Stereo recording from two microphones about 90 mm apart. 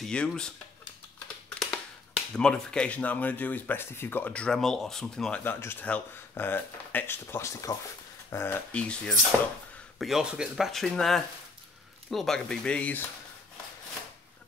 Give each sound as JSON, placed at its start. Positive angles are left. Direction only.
{"t": 0.0, "sound": "speech", "side_deg": 10}
{"t": 2.3, "sound": "speech", "side_deg": 10}
{"t": 5.4, "sound": "speech", "side_deg": 25}
{"t": 8.7, "sound": "speech", "side_deg": 10}
{"t": 9.9, "sound": "speech", "side_deg": -5}
{"t": 10.7, "sound": "speech", "side_deg": 5}